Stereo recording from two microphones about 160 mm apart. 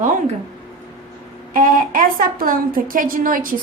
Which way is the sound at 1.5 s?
60° right (ahead or behind).